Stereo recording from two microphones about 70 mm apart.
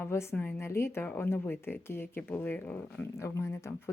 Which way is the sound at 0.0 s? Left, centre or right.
Left.